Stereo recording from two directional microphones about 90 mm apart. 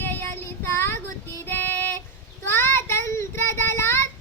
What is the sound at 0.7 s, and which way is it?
Child singing, 25° left (ahead or behind).